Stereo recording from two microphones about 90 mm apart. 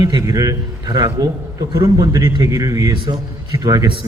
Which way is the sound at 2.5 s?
40° right (ahead or behind).